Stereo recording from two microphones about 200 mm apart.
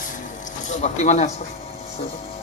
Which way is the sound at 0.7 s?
35° left (ahead or behind).